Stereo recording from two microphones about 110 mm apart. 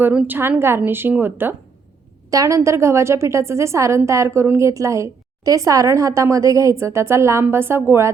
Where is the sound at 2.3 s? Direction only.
30° right (ahead or behind).